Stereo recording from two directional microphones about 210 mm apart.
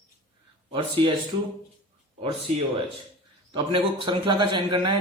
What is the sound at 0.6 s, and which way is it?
Speech, 25° right (ahead or behind).